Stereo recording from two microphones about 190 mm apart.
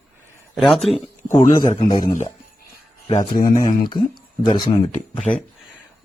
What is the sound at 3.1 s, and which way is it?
Speech, 50° left (ahead or behind).